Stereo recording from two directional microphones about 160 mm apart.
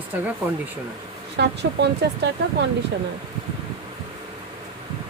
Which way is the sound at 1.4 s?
90° right.